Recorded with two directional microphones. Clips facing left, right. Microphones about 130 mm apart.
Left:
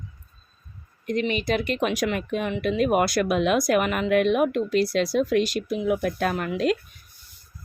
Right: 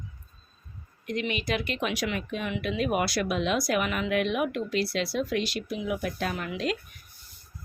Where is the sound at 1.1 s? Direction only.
40° left (ahead or behind).